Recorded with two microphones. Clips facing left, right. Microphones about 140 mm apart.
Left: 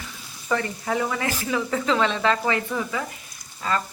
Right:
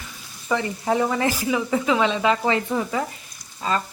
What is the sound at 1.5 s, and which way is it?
Speech, 15° right (ahead or behind).